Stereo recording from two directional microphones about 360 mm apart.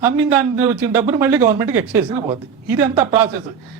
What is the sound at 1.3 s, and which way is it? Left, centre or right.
Speech, centre.